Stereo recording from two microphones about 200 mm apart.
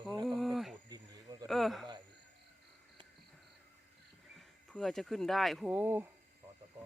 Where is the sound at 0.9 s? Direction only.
20° right (ahead or behind).